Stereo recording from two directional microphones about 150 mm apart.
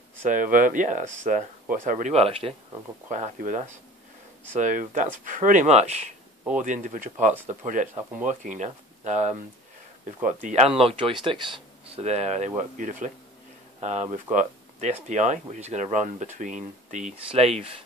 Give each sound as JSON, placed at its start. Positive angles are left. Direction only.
{"t": 0.2, "sound": "speech", "side_deg": -60}
{"t": 3.1, "sound": "speech", "side_deg": -55}
{"t": 6.6, "sound": "speech", "side_deg": -60}
{"t": 12.0, "sound": "speech", "side_deg": -45}
{"t": 17.3, "sound": "speech", "side_deg": -40}